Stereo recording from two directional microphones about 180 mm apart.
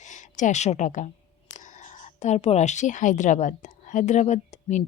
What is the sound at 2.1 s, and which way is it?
A woman's voice, 40° left (ahead or behind).